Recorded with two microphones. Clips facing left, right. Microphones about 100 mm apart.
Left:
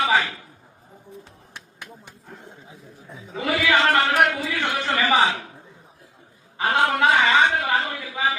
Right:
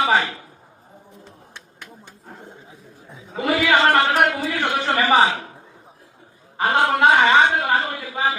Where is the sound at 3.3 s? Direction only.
30° right (ahead or behind).